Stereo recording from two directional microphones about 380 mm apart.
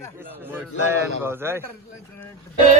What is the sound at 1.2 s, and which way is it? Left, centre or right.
Speech, centre.